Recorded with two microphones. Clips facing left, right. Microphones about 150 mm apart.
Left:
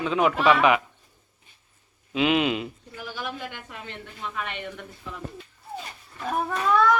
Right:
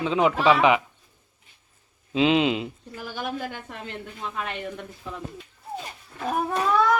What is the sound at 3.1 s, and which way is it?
Speech, 45° right (ahead or behind).